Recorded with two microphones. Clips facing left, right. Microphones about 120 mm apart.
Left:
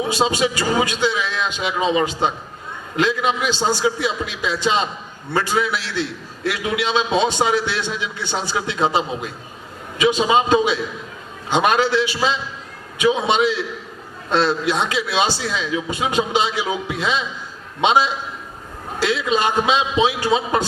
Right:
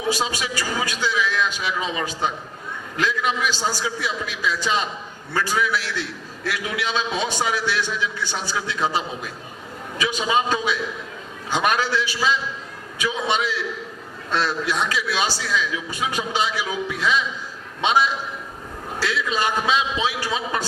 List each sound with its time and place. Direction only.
0.0 s a man's voice: 25° left (ahead or behind)